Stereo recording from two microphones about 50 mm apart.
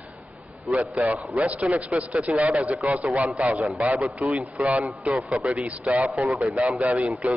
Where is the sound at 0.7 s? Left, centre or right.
Centre.